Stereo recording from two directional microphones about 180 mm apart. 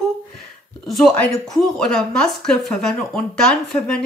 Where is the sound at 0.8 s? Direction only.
Centre (ahead or behind).